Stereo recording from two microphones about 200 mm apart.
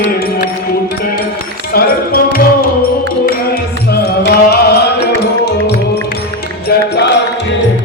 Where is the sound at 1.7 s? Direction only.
50° left (ahead or behind).